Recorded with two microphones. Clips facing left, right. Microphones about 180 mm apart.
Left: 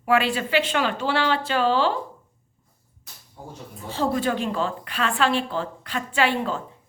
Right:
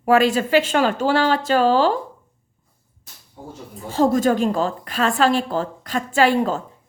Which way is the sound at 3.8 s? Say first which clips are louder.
Right 7 dB; 45° right (ahead or behind).